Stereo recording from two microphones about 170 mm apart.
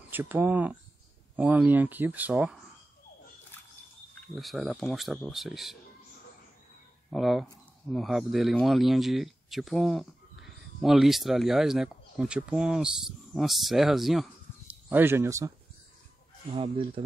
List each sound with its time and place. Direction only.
0.1 s speech: 10° right (ahead or behind)
4.4 s speech: centre (ahead or behind)
7.1 s speech: centre (ahead or behind)
14.9 s speech: 15° right (ahead or behind)
16.5 s speech: 35° right (ahead or behind)